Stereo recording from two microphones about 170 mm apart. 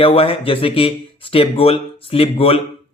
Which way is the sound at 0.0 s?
35° left (ahead or behind).